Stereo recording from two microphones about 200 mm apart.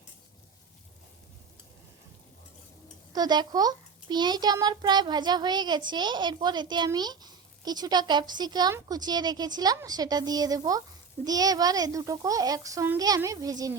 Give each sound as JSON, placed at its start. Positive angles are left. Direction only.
{"t": 3.1, "sound": "a child's voice", "side_deg": -20}